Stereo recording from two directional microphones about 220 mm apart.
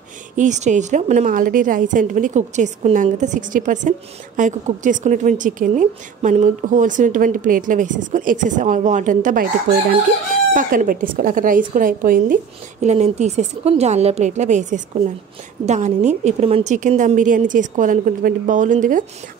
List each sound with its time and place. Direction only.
0.4 s a woman's voice: 35° right (ahead or behind)
10.5 s a woman's voice: 40° right (ahead or behind)